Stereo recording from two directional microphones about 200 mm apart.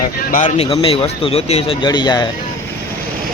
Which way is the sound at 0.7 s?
25° left (ahead or behind).